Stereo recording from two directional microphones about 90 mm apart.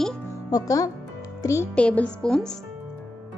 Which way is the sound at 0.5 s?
40° left (ahead or behind).